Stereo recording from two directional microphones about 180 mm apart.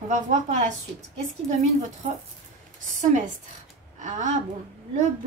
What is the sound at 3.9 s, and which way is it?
Speech, 45° right (ahead or behind).